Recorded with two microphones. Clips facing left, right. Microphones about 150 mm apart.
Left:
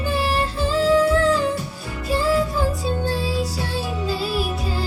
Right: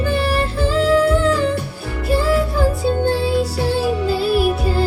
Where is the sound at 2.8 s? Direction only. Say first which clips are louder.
Right 6 dB; 60° right (ahead or behind).